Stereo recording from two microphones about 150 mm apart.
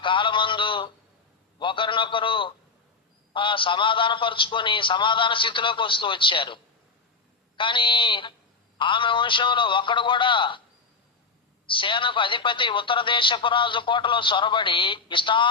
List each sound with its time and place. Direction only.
0.0 s a sound: 35° left (ahead or behind)
1.5 s speech: 35° left (ahead or behind)
11.6 s speech: 35° left (ahead or behind)